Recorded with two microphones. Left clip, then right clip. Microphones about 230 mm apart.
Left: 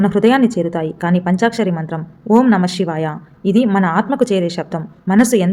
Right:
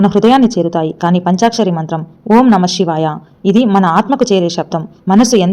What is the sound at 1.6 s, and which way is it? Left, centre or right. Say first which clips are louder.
Speech: right 5 dB; centre.